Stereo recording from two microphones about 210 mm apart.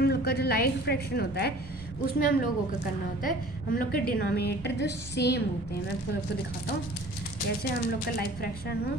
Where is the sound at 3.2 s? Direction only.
45° left (ahead or behind).